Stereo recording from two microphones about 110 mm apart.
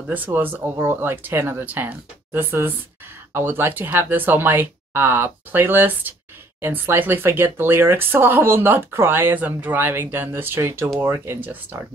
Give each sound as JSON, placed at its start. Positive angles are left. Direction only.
{"t": 0.1, "sound": "speech", "side_deg": -15}